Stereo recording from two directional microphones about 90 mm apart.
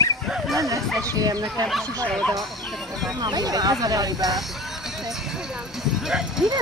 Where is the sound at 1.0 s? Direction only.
40° right (ahead or behind).